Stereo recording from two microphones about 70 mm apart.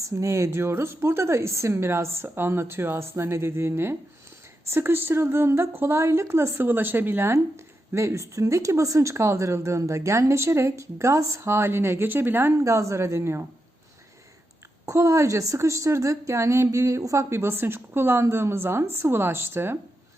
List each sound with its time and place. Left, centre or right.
0.0 s a woman's voice: right
7.3 s speech: right
12.5 s speech: right
14.8 s a woman's voice: right